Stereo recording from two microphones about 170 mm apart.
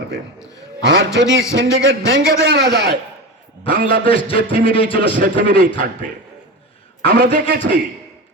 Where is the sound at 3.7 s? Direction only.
55° right (ahead or behind).